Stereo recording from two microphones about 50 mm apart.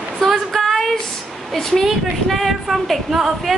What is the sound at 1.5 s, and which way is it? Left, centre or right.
A woman's voice, centre.